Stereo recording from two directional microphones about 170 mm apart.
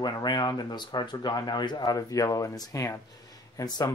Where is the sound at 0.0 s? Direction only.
25° left (ahead or behind).